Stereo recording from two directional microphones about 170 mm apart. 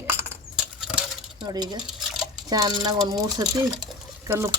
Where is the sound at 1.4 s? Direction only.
25° right (ahead or behind).